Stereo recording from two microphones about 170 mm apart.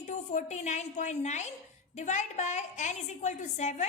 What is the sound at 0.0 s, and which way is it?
A woman's voice, 45° left (ahead or behind).